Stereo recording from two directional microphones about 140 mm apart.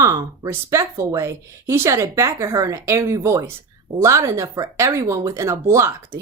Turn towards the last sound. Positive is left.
turn(degrees=-20)  # may be behind; listen again after turning